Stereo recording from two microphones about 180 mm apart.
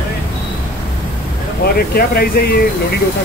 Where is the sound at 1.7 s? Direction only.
55° left (ahead or behind).